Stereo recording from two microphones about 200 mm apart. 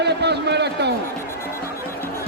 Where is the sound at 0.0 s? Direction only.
55° right (ahead or behind).